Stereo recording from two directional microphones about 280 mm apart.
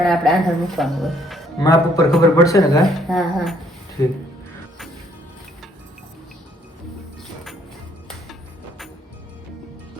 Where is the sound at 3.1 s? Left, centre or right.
Centre.